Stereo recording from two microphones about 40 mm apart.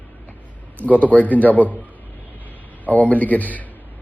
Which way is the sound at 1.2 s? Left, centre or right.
Left.